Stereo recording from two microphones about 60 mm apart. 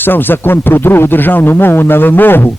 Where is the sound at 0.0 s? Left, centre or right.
Left.